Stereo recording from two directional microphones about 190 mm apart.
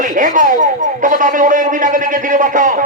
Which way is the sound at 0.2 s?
45° right (ahead or behind).